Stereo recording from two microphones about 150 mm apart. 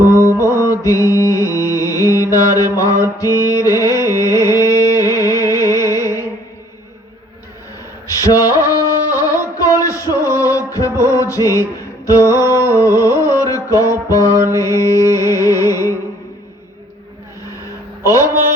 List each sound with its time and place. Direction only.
0.3 s mantra: 20° left (ahead or behind)
3.4 s music: 25° left (ahead or behind)
8.2 s a sound: 20° left (ahead or behind)
9.7 s music: 20° left (ahead or behind)
14.3 s mantra: 20° right (ahead or behind)
14.6 s music: 20° left (ahead or behind)
18.0 s mantra: 20° left (ahead or behind)